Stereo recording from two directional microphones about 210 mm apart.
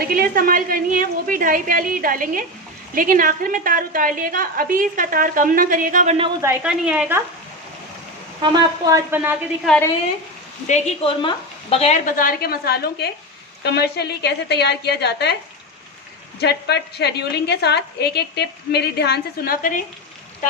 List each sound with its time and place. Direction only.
0.0 s a woman's voice: 45° right (ahead or behind)
6.4 s speech: 10° right (ahead or behind)
8.4 s a woman's voice: 15° right (ahead or behind)
9.6 s speech: 5° left (ahead or behind)
10.7 s a woman's voice: 30° left (ahead or behind); by 15.4 s 50° left (ahead or behind)
16.4 s a woman's voice: 50° left (ahead or behind)